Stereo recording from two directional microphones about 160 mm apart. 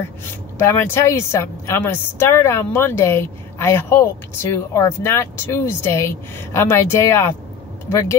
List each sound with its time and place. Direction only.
0.6 s a woman's voice: 15° left (ahead or behind)